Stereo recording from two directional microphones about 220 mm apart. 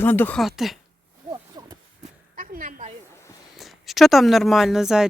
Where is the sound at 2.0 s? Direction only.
35° right (ahead or behind).